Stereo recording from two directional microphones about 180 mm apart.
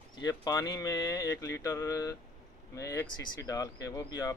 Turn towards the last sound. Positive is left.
turn(degrees=20)  # may be behind; listen again after turning